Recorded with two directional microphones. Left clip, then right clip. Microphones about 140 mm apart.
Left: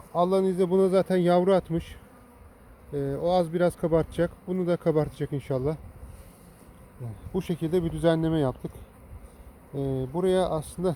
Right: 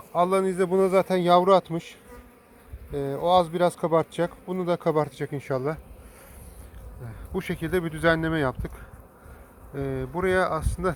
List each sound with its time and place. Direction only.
0.1 s a man's voice: 25° right (ahead or behind)
0.4 s a man's voice: 10° left (ahead or behind)
2.9 s a man's voice: 15° left (ahead or behind)
7.4 s a man's voice: 15° left (ahead or behind)
9.7 s speech: 25° right (ahead or behind)
10.2 s a man's voice: 10° left (ahead or behind)